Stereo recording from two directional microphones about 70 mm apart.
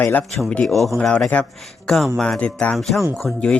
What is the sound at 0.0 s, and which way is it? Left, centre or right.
Speech, left.